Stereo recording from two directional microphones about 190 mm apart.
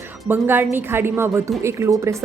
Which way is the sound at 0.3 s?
10° right (ahead or behind).